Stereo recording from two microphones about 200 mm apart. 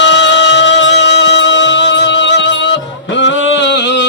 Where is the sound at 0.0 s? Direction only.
65° left (ahead or behind).